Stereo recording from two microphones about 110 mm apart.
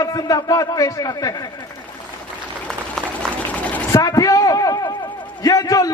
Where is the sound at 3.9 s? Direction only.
30° left (ahead or behind).